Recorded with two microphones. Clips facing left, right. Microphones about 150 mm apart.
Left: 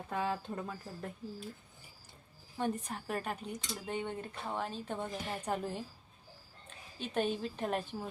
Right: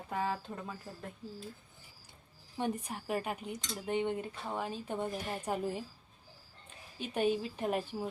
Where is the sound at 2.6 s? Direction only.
10° right (ahead or behind).